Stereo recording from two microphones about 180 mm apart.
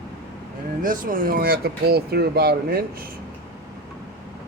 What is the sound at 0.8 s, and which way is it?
Speech, 50° right (ahead or behind).